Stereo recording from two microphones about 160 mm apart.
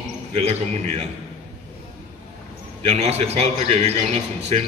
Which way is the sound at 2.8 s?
40° right (ahead or behind).